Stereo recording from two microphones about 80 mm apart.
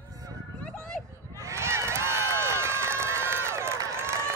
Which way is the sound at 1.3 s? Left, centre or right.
Right.